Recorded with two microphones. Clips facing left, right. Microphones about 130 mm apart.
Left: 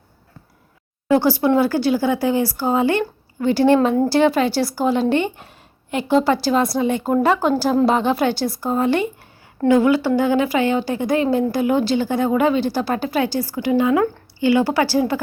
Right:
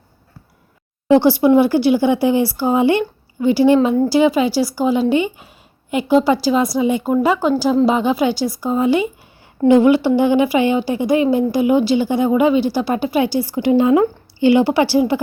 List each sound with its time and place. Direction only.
1.0 s a woman's voice: 20° right (ahead or behind)
3.8 s speech: centre (ahead or behind)
9.6 s a woman's voice: 20° right (ahead or behind)
13.6 s speech: 25° right (ahead or behind)